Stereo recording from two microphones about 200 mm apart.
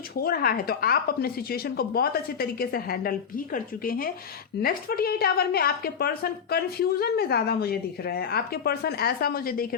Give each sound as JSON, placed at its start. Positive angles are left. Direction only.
{"t": 0.2, "sound": "speech", "side_deg": 50}